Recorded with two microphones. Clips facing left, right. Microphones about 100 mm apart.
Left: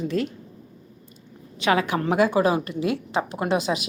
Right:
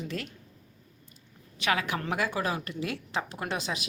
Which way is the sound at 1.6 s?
30° left (ahead or behind).